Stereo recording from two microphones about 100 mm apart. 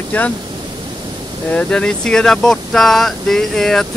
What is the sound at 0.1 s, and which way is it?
Speech, 15° left (ahead or behind).